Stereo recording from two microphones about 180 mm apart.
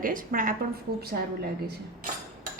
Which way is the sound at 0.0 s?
50° right (ahead or behind).